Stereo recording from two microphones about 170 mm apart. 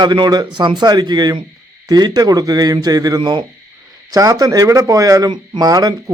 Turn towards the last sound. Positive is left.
turn(degrees=-25)  # may be behind; listen again after turning